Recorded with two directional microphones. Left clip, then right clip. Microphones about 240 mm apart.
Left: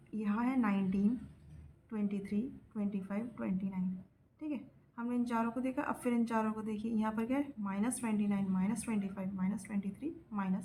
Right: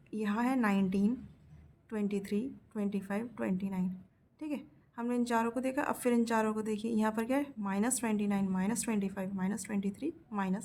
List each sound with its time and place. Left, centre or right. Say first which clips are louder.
0.1 s a woman's voice: right 3 dB; right